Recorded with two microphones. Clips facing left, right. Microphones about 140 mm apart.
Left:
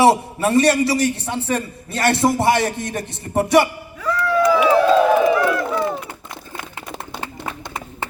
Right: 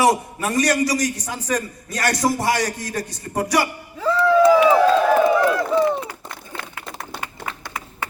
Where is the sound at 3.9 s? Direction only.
25° right (ahead or behind).